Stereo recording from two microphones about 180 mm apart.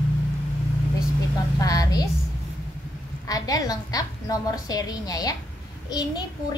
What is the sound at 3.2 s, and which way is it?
A woman's voice, 20° left (ahead or behind).